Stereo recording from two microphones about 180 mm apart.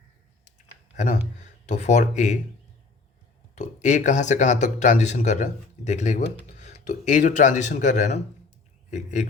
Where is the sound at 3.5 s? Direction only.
45° left (ahead or behind).